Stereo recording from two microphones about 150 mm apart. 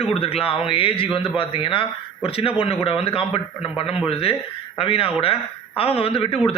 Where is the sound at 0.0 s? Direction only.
40° left (ahead or behind).